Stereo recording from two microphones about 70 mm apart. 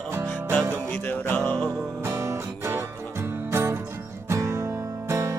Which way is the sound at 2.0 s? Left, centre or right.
Right.